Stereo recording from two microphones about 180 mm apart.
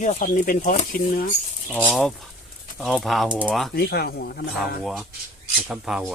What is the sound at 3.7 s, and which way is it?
Speech, 60° left (ahead or behind).